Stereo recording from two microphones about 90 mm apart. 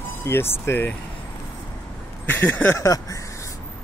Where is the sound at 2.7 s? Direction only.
35° left (ahead or behind).